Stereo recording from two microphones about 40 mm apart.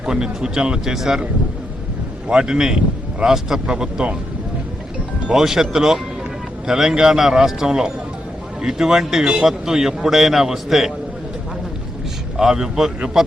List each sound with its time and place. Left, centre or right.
0.0 s speech: centre
0.9 s speech: centre
2.3 s speech: centre
5.3 s speech: centre
12.4 s speech: centre